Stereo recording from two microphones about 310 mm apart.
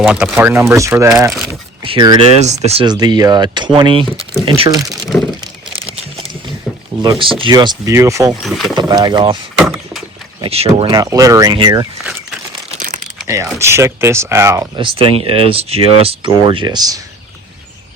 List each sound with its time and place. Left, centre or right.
0.0 s speech: centre
5.4 s crumpling: centre
6.7 s a sound: centre
7.0 s speech: centre
8.4 s speech: centre
8.7 s speech: centre
9.6 s a sound: centre
10.4 s speech: centre
13.1 s speech: centre